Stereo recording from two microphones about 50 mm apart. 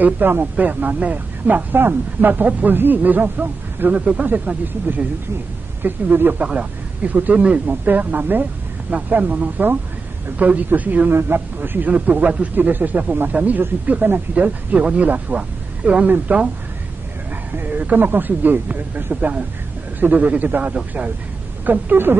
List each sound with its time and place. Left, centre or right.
0.0 s a man's voice: right
6.4 s speech: right
11.1 s a man's voice: right
11.9 s speech: right
17.6 s speech: right